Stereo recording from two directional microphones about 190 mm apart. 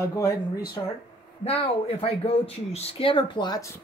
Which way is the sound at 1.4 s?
30° left (ahead or behind).